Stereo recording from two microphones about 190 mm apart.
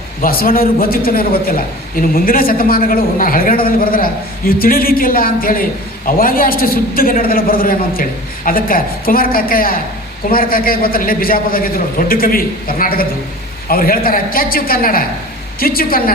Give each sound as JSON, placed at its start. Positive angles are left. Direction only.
{"t": 0.2, "sound": "a man's voice", "side_deg": 50}